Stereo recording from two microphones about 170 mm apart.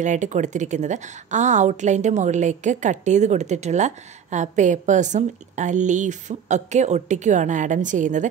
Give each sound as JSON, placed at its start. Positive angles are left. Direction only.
{"t": 0.0, "sound": "a woman's voice", "side_deg": -45}